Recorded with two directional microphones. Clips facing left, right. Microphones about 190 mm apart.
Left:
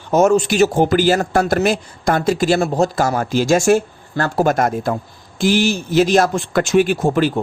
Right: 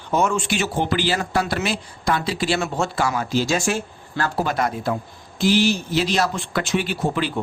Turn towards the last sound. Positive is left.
turn(degrees=45)  # may be behind; listen again after turning